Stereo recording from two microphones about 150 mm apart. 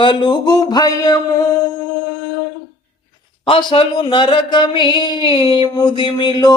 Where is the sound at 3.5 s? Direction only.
35° left (ahead or behind).